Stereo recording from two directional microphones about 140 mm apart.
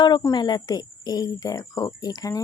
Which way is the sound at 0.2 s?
30° left (ahead or behind).